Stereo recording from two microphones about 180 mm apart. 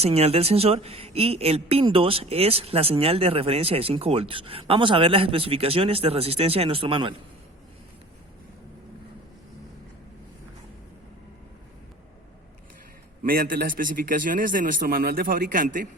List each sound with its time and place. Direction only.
0.0 s a woman's voice: 35° right (ahead or behind)
13.2 s a man's voice: 50° right (ahead or behind)